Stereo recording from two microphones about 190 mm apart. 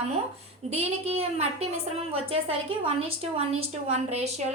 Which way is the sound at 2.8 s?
30° right (ahead or behind).